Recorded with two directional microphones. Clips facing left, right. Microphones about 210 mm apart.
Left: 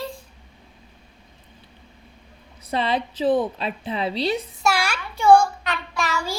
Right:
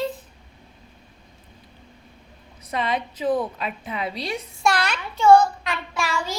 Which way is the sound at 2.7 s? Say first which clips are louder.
Left 2 dB; 30° left (ahead or behind).